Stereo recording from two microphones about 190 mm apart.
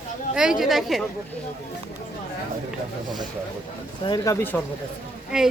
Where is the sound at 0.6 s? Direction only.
Centre (ahead or behind).